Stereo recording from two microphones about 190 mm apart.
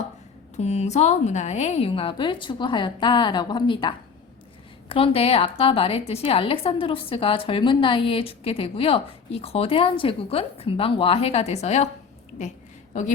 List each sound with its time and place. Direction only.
0.5 s a woman's voice: 35° left (ahead or behind)
12.9 s speech: 40° left (ahead or behind)